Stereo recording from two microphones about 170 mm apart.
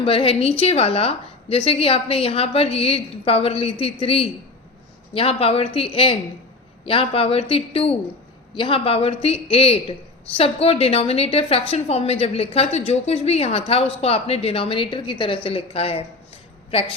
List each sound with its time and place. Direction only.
0.0 s a woman's voice: 35° left (ahead or behind)